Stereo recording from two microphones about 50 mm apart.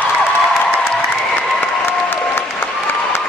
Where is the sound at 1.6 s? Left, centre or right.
Left.